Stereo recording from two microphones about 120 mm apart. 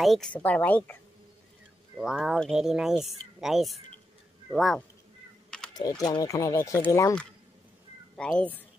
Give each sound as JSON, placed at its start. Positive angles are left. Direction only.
{"t": 0.0, "sound": "speech", "side_deg": 0}
{"t": 0.3, "sound": "a woman's voice", "side_deg": 15}
{"t": 2.0, "sound": "speech", "side_deg": -5}
{"t": 5.8, "sound": "speech", "side_deg": 35}
{"t": 8.2, "sound": "a woman's voice", "side_deg": 10}